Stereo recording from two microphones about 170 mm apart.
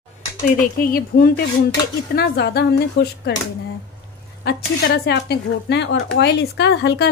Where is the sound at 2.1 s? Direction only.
75° left (ahead or behind).